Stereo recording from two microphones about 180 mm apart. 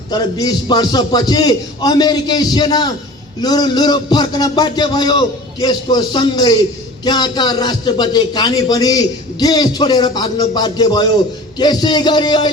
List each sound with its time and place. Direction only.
0.1 s a man's voice: 20° left (ahead or behind)